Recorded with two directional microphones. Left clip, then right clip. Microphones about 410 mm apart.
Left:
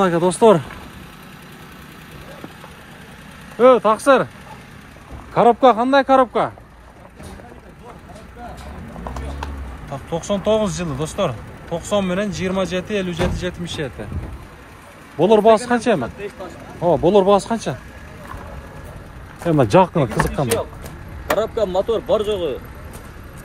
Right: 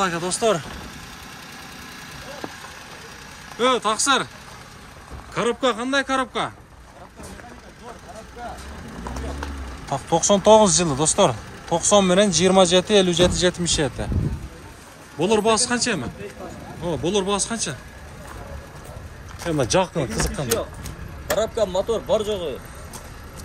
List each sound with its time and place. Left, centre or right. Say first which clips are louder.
0.0 s speech: left 8 dB; centre
3.5 s speech: left 8 dB; centre
5.3 s speech: left 9 dB; centre
9.8 s speech: right 5 dB; centre
15.1 s speech: left 7 dB; centre
19.4 s speech: left 7 dB; centre
21.8 s speech: left 3 dB; left
22.1 s speech: left 3 dB; centre